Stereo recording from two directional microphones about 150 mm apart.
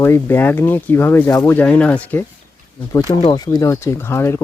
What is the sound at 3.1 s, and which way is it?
Speech, 25° left (ahead or behind).